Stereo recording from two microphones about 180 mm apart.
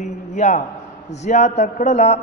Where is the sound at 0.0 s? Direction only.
40° left (ahead or behind).